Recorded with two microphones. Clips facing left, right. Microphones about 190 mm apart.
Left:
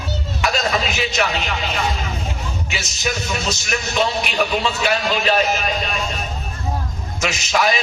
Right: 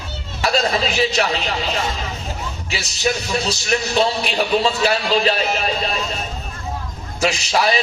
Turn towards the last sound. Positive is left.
turn(degrees=-35)  # may be behind; listen again after turning